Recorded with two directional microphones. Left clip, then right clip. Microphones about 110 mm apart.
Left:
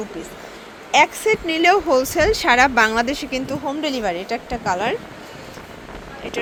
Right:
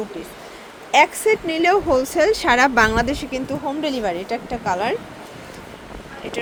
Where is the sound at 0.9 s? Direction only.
15° right (ahead or behind).